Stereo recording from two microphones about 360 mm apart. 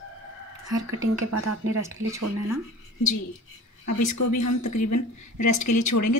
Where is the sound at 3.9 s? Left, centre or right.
Left.